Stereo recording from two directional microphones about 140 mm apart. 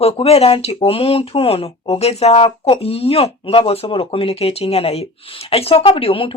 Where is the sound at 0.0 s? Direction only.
45° left (ahead or behind).